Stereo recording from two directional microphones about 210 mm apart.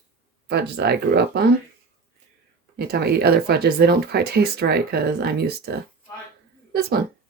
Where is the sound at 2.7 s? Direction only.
50° right (ahead or behind).